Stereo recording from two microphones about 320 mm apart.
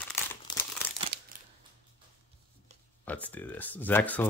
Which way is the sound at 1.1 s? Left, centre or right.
Right.